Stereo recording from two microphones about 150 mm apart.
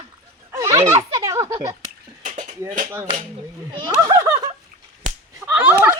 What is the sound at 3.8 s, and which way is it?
Speech, 25° right (ahead or behind).